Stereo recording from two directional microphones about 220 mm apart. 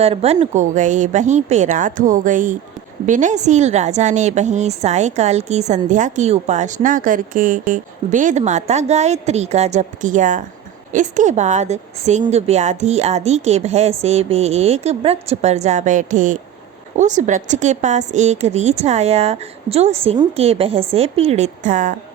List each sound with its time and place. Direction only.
0.0 s a woman's voice: 25° right (ahead or behind)